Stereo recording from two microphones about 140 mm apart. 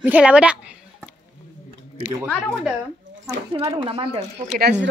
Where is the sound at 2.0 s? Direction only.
10° right (ahead or behind).